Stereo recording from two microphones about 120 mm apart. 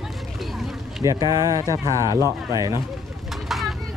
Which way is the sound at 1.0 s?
30° right (ahead or behind).